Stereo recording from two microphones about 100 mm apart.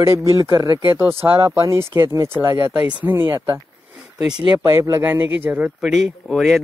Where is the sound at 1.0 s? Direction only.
25° right (ahead or behind).